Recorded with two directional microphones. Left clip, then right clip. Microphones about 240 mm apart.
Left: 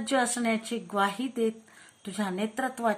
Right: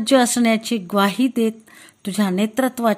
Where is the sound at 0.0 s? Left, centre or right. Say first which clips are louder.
Right 11 dB; right.